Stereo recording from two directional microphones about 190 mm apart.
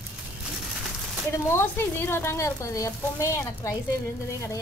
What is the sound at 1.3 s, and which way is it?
A woman's voice, 15° left (ahead or behind).